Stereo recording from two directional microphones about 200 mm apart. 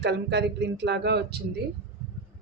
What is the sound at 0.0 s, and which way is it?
Speech, 55° right (ahead or behind).